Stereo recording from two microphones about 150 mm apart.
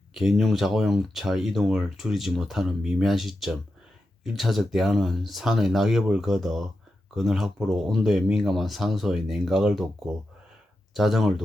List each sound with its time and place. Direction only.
0.1 s speech: centre (ahead or behind)
10.9 s speech: centre (ahead or behind)